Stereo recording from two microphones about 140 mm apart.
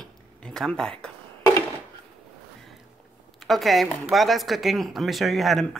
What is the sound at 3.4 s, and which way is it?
Speech, centre (ahead or behind).